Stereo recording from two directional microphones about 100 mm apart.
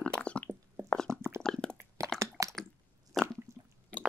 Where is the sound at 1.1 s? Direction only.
25° right (ahead or behind).